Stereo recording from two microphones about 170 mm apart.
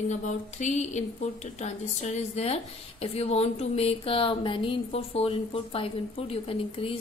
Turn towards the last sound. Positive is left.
turn(degrees=35)  # may be behind; listen again after turning